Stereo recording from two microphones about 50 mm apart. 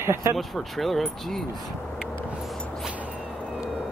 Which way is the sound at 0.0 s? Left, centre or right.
Right.